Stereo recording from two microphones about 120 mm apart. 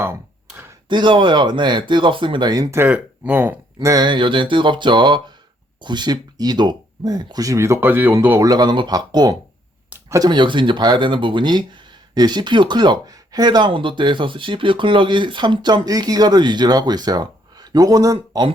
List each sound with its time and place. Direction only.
0.0 s a sound: 20° right (ahead or behind)
0.9 s speech: 40° right (ahead or behind); by 3.6 s 15° right (ahead or behind)
3.8 s speech: 35° right (ahead or behind); by 8.1 s 15° right (ahead or behind)
8.4 s speech: 35° right (ahead or behind)